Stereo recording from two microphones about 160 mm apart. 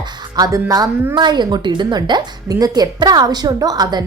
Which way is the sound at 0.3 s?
20° right (ahead or behind).